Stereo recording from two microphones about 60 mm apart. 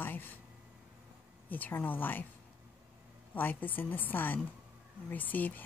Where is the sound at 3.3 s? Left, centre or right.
Left.